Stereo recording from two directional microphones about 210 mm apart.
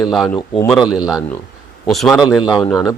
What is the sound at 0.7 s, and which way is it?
Speech, 5° right (ahead or behind).